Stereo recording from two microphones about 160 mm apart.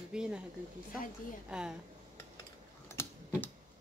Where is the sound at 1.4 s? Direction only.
5° right (ahead or behind).